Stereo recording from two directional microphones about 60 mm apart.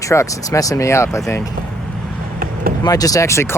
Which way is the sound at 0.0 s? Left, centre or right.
Left.